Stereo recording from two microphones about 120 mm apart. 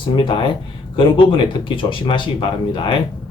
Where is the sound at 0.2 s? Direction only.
45° left (ahead or behind).